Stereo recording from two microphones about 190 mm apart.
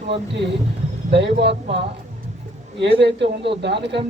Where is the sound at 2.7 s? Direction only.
65° right (ahead or behind).